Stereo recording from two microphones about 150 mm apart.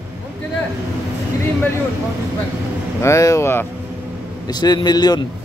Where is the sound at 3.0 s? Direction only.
20° left (ahead or behind).